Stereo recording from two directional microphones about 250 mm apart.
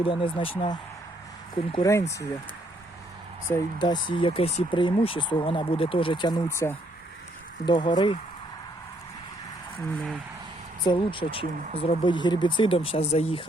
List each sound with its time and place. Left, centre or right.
0.0 s speech: left
3.5 s speech: centre
10.8 s speech: left